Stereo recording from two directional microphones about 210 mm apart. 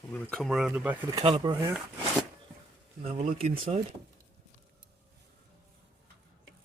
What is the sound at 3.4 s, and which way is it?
Speech, 30° right (ahead or behind).